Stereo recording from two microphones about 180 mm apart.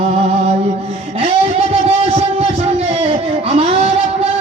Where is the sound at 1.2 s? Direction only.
35° right (ahead or behind).